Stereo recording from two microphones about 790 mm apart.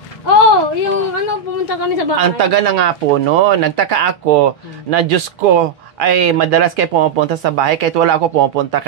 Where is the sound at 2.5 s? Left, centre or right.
Right.